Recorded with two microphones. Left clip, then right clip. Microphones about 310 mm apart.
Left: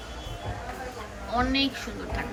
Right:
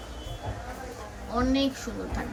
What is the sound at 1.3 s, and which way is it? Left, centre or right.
Speech, centre.